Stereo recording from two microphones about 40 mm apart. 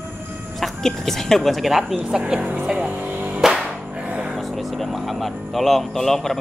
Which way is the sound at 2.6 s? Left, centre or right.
Centre.